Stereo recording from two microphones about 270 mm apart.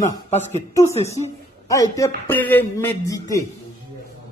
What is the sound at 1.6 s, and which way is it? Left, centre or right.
Speech, centre.